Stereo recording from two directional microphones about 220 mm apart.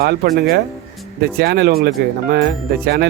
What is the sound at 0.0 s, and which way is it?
Speech, 45° right (ahead or behind).